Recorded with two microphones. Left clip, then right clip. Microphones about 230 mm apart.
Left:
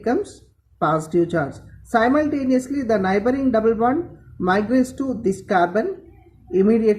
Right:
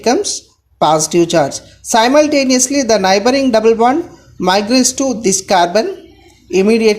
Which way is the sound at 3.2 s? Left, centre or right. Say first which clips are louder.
Right 8 dB; centre.